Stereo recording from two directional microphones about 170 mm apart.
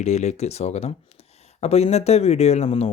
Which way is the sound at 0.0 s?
40° left (ahead or behind).